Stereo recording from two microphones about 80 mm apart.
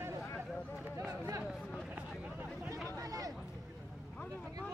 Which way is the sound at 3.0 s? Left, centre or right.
Right.